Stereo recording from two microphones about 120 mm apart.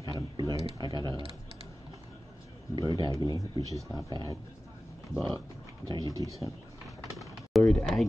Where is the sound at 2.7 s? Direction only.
35° right (ahead or behind).